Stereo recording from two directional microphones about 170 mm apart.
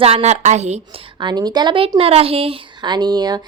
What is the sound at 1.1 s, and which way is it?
Speech, 25° right (ahead or behind).